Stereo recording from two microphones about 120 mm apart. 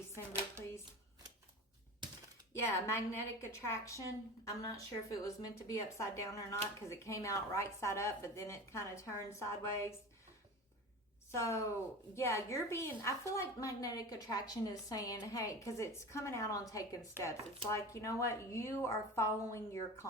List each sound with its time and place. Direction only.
2.5 s a woman's voice: 20° left (ahead or behind)
11.3 s a woman's voice: 25° left (ahead or behind)